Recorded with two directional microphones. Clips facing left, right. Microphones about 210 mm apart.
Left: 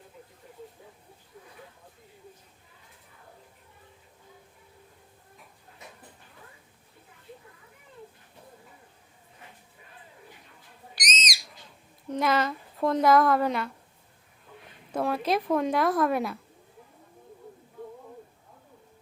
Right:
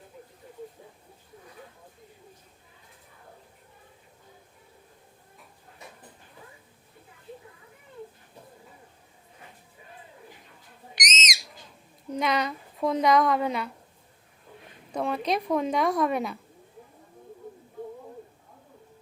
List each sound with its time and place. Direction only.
10.9 s owl: 20° right (ahead or behind)
12.2 s a woman's voice: centre (ahead or behind)
14.9 s a woman's voice: 5° left (ahead or behind)